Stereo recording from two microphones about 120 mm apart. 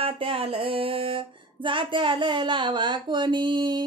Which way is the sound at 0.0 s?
50° right (ahead or behind).